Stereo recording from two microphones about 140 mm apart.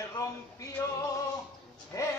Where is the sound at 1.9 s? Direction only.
20° left (ahead or behind).